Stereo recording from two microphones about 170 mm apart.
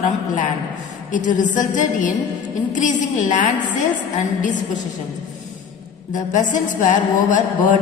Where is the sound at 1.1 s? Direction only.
50° left (ahead or behind).